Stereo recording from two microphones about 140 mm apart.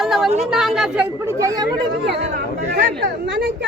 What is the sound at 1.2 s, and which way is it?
Speech, 20° right (ahead or behind).